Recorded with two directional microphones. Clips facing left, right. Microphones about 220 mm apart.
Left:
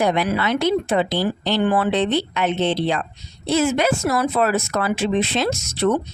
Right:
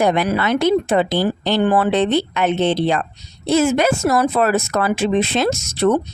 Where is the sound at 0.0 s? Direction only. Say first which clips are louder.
Right 3 dB; 50° right (ahead or behind).